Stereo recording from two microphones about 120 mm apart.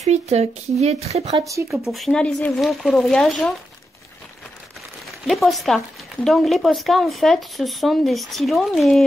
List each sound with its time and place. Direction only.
0.0 s speech: 65° right (ahead or behind)
1.9 s speech: centre (ahead or behind)
5.2 s speech: centre (ahead or behind)